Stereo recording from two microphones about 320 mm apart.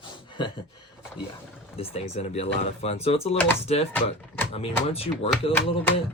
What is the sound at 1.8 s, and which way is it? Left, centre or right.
Speech, centre.